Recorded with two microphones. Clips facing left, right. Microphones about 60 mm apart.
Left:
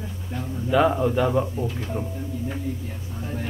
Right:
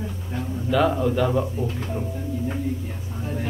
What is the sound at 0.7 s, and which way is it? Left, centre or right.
Speech, centre.